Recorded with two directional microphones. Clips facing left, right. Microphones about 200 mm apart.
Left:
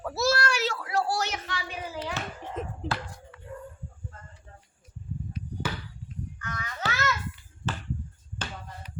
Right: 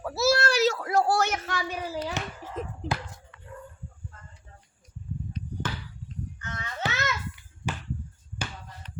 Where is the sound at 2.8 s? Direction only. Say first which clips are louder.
Right 1 dB; centre (ahead or behind).